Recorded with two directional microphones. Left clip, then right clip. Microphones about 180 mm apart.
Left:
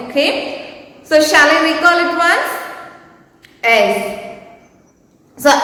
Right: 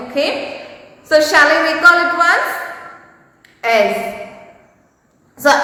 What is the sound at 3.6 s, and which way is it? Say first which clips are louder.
Speech: left 2 dB; 5° right (ahead or behind).